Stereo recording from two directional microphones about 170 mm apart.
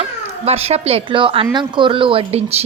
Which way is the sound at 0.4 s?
35° right (ahead or behind).